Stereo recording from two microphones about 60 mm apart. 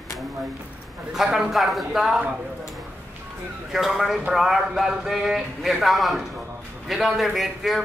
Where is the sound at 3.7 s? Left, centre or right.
Centre.